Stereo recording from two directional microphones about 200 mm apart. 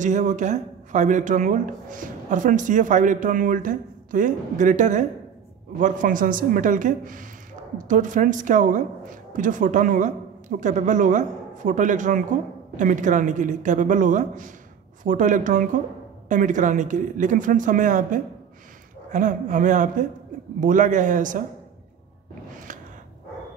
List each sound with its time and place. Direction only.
0.0 s a woman's voice: 40° right (ahead or behind)